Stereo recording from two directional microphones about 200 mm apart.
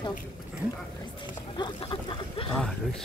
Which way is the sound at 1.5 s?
25° left (ahead or behind).